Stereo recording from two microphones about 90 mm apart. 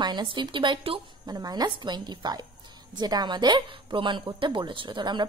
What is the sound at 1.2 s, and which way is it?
A woman's voice, 45° right (ahead or behind).